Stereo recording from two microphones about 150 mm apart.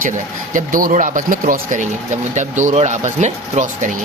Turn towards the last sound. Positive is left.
turn(degrees=-50)  # may be behind; listen again after turning